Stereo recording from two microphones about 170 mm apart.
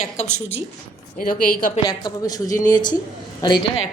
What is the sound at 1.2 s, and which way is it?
Speech, 55° left (ahead or behind).